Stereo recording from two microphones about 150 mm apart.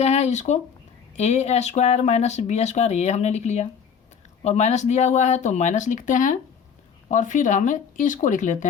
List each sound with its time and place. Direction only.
0.0 s speech: 45° left (ahead or behind)